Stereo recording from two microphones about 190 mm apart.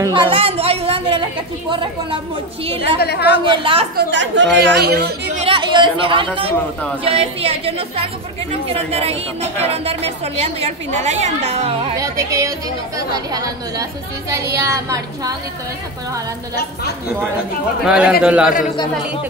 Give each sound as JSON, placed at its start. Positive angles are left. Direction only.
{"t": 0.0, "sound": "a woman's voice", "side_deg": -25}
{"t": 3.0, "sound": "a woman's voice", "side_deg": 60}
{"t": 3.4, "sound": "a woman's voice", "side_deg": -25}
{"t": 3.9, "sound": "speech", "side_deg": -75}
{"t": 5.4, "sound": "a woman's voice", "side_deg": -25}
{"t": 12.0, "sound": "a woman's voice", "side_deg": -15}
{"t": 17.8, "sound": "a man's voice", "side_deg": -5}